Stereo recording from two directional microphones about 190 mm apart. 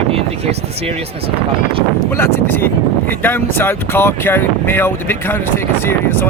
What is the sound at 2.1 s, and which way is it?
Speech, 10° left (ahead or behind).